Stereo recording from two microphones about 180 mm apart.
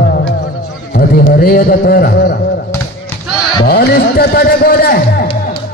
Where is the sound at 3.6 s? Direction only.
55° left (ahead or behind).